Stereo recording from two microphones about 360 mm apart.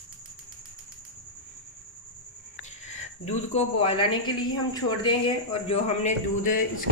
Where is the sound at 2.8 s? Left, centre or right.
Centre.